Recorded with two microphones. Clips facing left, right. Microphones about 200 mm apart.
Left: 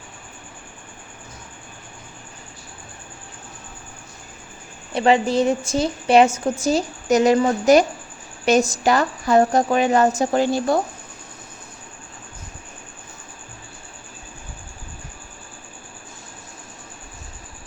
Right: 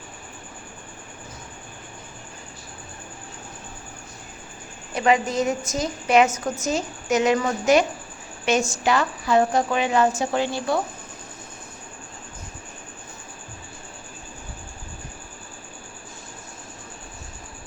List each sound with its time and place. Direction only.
4.9 s a woman's voice: 30° left (ahead or behind)